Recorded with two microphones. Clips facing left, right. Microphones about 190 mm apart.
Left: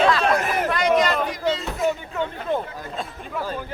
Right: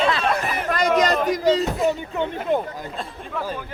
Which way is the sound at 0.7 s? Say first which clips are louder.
Right 2 dB; 40° right (ahead or behind).